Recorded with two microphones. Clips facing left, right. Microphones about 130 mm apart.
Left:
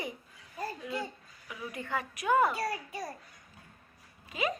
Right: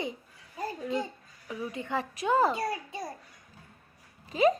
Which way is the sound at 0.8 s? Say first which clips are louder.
Right 5 dB; 40° right (ahead or behind).